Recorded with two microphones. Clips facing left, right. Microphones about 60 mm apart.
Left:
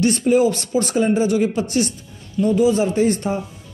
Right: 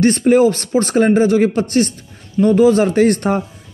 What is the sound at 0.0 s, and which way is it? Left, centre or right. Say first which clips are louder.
A man's voice: right 4 dB; right.